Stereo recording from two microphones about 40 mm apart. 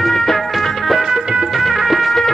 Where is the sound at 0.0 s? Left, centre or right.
Centre.